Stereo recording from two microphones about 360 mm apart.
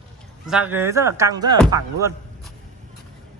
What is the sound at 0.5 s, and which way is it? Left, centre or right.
Speech, centre.